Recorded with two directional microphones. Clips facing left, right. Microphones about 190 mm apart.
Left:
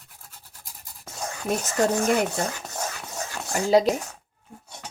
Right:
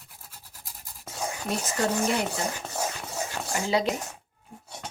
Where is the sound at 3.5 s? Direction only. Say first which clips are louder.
Left 5 dB; 45° left (ahead or behind).